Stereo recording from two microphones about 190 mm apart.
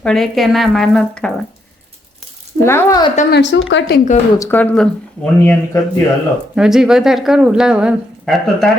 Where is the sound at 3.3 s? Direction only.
70° left (ahead or behind).